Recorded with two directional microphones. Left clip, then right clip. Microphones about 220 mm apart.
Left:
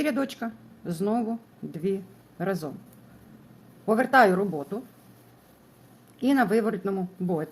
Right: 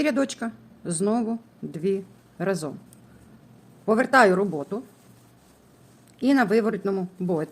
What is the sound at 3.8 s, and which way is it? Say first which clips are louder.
Speech: right 2 dB; 20° right (ahead or behind).